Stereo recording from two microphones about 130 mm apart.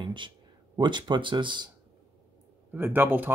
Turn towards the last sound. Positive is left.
turn(degrees=-15)  # may be behind; listen again after turning